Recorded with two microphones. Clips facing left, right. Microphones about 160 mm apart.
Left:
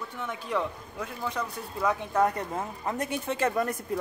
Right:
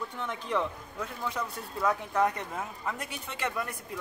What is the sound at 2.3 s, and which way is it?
Speech, 35° left (ahead or behind).